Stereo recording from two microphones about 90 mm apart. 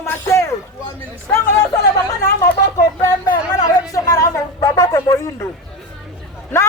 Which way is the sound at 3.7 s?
45° left (ahead or behind).